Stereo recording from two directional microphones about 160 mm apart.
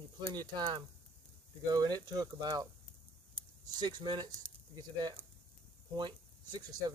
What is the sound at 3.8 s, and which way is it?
Speech, 25° right (ahead or behind).